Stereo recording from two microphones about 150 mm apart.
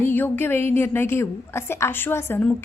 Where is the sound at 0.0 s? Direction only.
15° left (ahead or behind).